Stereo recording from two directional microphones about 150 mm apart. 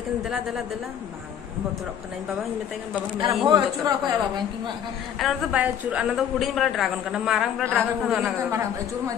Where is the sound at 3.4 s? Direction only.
25° right (ahead or behind).